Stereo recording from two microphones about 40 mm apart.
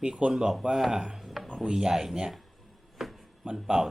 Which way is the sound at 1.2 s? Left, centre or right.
Centre.